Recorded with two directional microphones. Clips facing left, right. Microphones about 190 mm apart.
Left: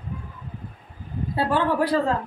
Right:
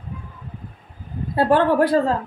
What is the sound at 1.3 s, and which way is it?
Speech, 50° right (ahead or behind).